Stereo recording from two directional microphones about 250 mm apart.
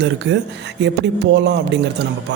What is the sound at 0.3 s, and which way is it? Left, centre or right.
Speech, right.